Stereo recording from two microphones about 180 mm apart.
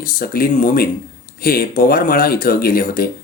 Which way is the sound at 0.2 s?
50° left (ahead or behind).